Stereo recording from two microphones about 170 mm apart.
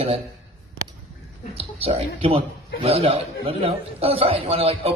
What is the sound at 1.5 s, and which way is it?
A man's voice, 35° right (ahead or behind).